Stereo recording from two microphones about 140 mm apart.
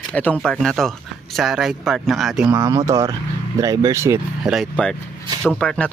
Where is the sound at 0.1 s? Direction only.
10° left (ahead or behind); by 2.6 s 5° right (ahead or behind).